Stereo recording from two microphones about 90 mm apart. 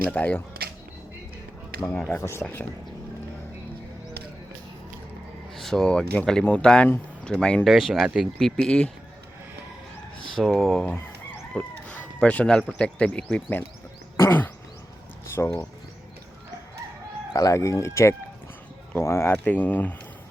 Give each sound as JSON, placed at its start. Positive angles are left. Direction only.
{"t": 0.1, "sound": "speech", "side_deg": 20}
{"t": 2.0, "sound": "speech", "side_deg": 25}
{"t": 5.5, "sound": "speech", "side_deg": 5}
{"t": 8.4, "sound": "speech", "side_deg": 5}
{"t": 10.4, "sound": "speech", "side_deg": 0}
{"t": 10.9, "sound": "chicken", "side_deg": 15}
{"t": 12.8, "sound": "speech", "side_deg": 15}
{"t": 14.2, "sound": "a sound", "side_deg": 25}
{"t": 15.4, "sound": "speech", "side_deg": 20}
{"t": 17.3, "sound": "speech", "side_deg": 40}
{"t": 19.3, "sound": "speech", "side_deg": 15}